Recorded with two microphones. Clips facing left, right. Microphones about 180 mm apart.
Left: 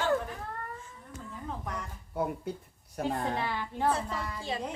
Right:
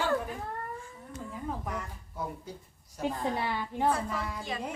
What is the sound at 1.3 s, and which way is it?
Speech, 5° right (ahead or behind).